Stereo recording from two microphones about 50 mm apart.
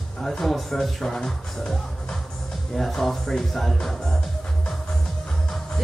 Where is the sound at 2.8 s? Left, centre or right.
Centre.